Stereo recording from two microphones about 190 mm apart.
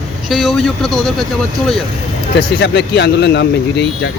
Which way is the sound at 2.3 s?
60° left (ahead or behind).